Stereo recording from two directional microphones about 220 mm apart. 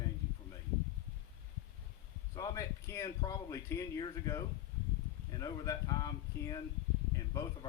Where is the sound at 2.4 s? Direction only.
15° left (ahead or behind).